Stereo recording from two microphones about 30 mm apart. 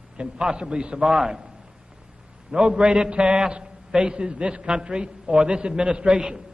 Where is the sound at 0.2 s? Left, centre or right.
Right.